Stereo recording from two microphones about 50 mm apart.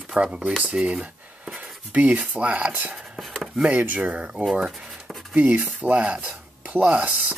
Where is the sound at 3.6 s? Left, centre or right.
Right.